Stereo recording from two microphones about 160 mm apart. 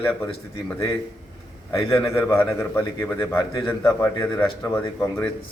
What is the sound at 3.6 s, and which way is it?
Speech, 15° left (ahead or behind).